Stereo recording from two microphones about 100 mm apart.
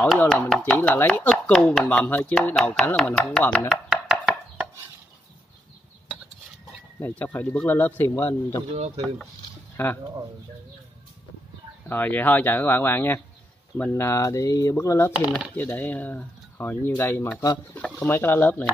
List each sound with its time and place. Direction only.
0.6 s speech: 10° left (ahead or behind)
1.5 s speech: 5° left (ahead or behind)
1.9 s speech: 15° left (ahead or behind)
3.6 s a sound: 5° right (ahead or behind)
7.0 s speech: 20° left (ahead or behind)
8.7 s speech: 90° right
9.8 s speech: 25° left (ahead or behind)
11.9 s speech: 20° left (ahead or behind)
14.0 s speech: 30° left (ahead or behind)
15.1 s speech: 10° right (ahead or behind)
15.5 s speech: 20° left (ahead or behind)